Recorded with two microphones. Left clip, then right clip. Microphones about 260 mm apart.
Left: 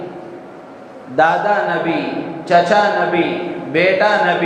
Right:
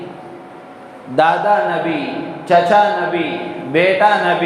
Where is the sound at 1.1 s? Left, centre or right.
Right.